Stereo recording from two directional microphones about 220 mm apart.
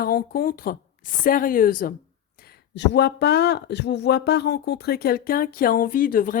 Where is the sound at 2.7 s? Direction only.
50° left (ahead or behind).